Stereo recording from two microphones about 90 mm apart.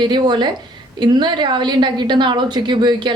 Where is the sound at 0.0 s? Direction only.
55° right (ahead or behind).